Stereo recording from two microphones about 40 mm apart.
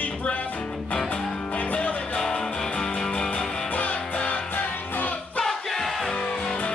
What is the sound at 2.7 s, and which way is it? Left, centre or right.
Music, left.